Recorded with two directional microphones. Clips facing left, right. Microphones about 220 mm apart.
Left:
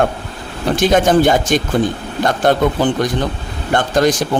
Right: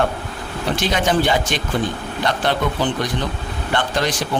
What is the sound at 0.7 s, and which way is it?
Speech, 50° left (ahead or behind).